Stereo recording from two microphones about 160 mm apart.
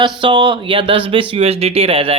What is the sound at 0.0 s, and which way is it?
Speech, 30° right (ahead or behind).